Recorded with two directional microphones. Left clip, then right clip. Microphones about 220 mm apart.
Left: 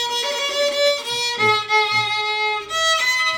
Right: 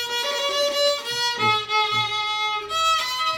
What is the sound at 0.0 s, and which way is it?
Music, 5° left (ahead or behind).